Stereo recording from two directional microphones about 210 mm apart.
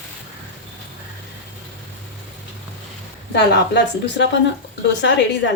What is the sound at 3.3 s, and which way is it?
A woman's voice, 55° left (ahead or behind).